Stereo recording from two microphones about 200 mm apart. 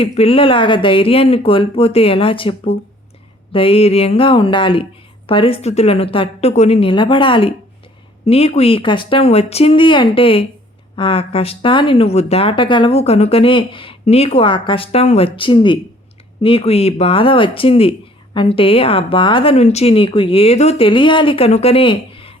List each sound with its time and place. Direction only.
0.0 s speech: 30° left (ahead or behind)